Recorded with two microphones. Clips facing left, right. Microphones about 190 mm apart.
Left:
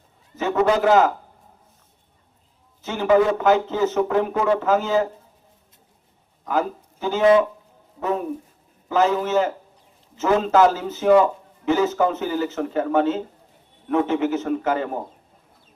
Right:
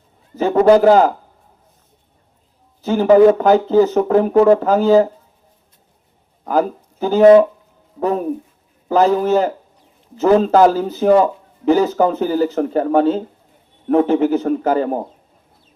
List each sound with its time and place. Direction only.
0.3 s speech: 35° right (ahead or behind)
2.8 s speech: 35° right (ahead or behind)
6.4 s speech: 35° right (ahead or behind)